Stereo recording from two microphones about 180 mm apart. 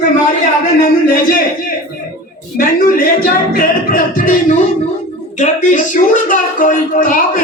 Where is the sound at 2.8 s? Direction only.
55° left (ahead or behind).